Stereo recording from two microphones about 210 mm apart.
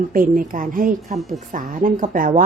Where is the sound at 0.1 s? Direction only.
40° right (ahead or behind).